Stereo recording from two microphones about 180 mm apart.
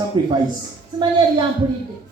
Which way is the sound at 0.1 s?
25° right (ahead or behind).